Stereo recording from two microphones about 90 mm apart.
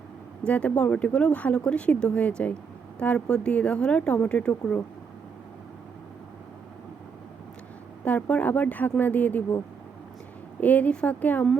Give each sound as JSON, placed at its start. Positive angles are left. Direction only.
{"t": 0.4, "sound": "speech", "side_deg": 15}
{"t": 8.0, "sound": "speech", "side_deg": 15}
{"t": 10.6, "sound": "speech", "side_deg": 15}